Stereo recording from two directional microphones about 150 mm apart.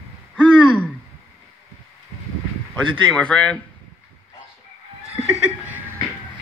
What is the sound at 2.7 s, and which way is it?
Speech, 5° left (ahead or behind).